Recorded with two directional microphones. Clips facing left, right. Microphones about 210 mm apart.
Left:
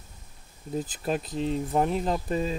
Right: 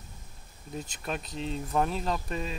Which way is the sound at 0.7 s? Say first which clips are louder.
Left 7 dB; 30° left (ahead or behind).